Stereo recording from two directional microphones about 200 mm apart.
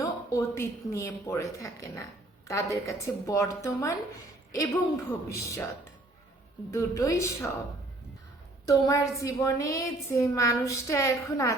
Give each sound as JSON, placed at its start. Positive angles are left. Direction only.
{"t": 0.0, "sound": "a woman's voice", "side_deg": 15}
{"t": 6.7, "sound": "a woman's voice", "side_deg": 15}
{"t": 8.6, "sound": "a woman's voice", "side_deg": 15}